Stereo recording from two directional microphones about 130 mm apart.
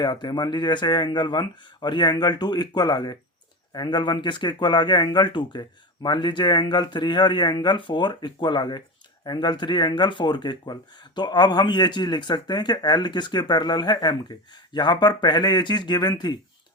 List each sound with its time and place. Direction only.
0.0 s a man's voice: 35° left (ahead or behind)